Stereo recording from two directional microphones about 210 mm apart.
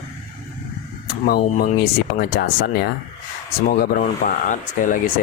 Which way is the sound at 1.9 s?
45° left (ahead or behind).